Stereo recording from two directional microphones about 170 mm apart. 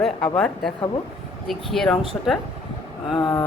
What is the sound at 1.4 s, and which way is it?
Speech, centre (ahead or behind).